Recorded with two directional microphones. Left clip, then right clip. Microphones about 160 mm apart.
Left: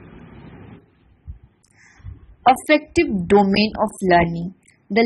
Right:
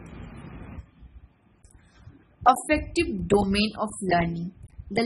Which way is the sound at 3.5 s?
25° left (ahead or behind).